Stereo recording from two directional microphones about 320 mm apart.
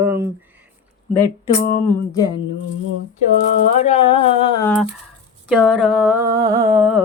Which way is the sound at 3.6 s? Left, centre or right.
Left.